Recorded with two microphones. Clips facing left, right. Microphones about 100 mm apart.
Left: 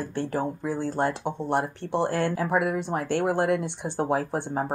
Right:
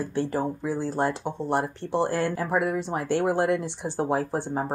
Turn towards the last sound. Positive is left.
turn(degrees=0)  # may be behind; listen again after turning